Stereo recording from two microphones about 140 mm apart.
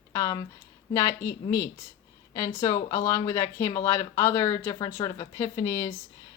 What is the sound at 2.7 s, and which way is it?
Speech, 25° left (ahead or behind).